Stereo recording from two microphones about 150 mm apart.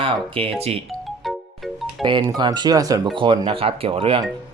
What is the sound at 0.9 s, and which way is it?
Music, centre (ahead or behind).